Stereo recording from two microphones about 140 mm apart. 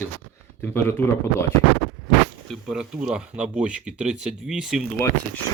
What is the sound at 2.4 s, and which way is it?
Speech, centre (ahead or behind).